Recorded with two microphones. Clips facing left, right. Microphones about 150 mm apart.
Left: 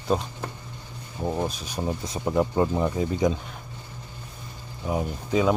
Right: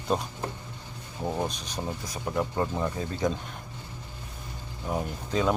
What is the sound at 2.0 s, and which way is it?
Speech, 20° left (ahead or behind).